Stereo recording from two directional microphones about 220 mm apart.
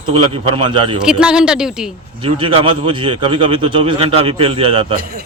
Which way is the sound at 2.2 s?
25° right (ahead or behind).